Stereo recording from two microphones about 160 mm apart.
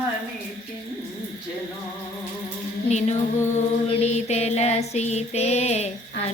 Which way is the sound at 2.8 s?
45° left (ahead or behind).